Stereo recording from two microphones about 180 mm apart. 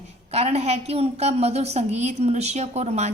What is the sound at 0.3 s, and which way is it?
A woman's voice, 35° right (ahead or behind).